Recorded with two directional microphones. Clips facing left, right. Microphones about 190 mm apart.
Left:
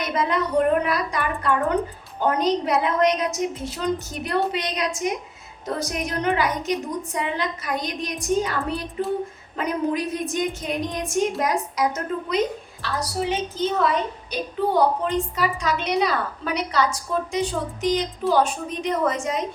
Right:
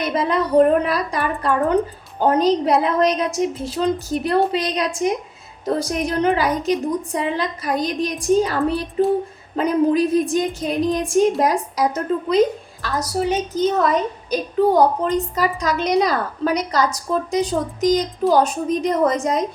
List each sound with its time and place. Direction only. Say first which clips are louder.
0.0 s a woman's voice: right 3 dB; 30° right (ahead or behind)
12.8 s a woman's voice: right 4 dB; 45° right (ahead or behind)